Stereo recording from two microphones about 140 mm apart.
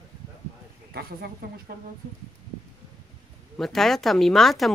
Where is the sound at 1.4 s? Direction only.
90° right.